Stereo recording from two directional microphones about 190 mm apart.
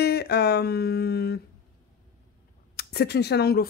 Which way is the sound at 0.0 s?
55° left (ahead or behind).